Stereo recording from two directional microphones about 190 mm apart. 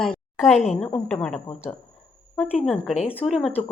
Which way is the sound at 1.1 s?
5° left (ahead or behind).